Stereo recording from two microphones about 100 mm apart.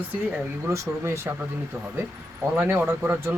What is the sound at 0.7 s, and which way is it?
Speech, 30° right (ahead or behind).